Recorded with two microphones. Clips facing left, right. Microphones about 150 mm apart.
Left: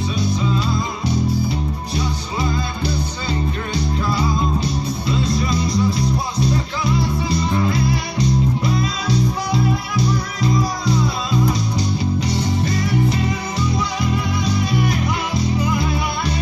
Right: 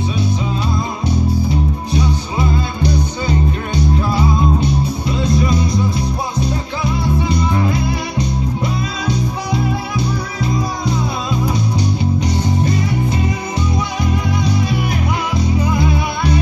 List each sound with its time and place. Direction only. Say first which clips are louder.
5.3 s music: right 3 dB; 35° left (ahead or behind)